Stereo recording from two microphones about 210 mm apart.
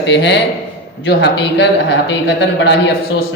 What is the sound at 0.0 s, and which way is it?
Speech, 60° left (ahead or behind).